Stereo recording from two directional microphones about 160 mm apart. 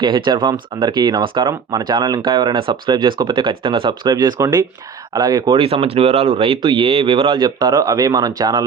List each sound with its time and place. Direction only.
0.0 s speech: 30° right (ahead or behind)